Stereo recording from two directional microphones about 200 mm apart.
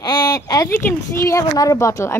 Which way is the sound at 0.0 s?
20° left (ahead or behind).